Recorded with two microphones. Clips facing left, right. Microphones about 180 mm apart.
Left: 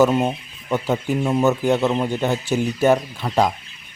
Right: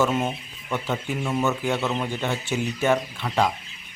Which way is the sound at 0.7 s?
40° left (ahead or behind).